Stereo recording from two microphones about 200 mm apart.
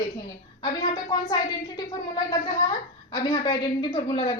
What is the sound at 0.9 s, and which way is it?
A woman's voice, 20° left (ahead or behind).